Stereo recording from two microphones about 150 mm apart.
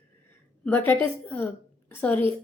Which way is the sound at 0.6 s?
10° left (ahead or behind).